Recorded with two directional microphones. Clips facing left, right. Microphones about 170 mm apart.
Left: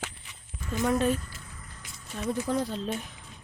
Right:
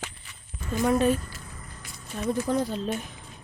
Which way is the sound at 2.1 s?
5° right (ahead or behind).